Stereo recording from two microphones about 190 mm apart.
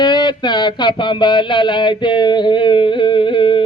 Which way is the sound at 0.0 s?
20° left (ahead or behind).